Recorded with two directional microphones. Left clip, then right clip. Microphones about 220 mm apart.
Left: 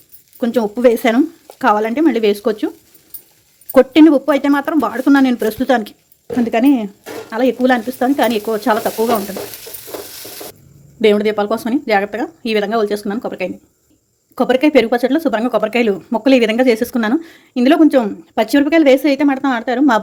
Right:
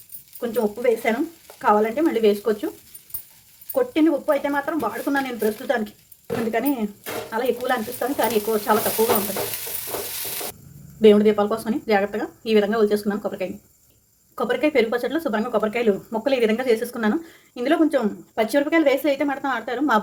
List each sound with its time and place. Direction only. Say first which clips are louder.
0.3 s speech: left 6 dB; 45° left (ahead or behind)
3.7 s speech: left 11 dB; 50° left (ahead or behind)
11.0 s speech: left 2 dB; 40° left (ahead or behind)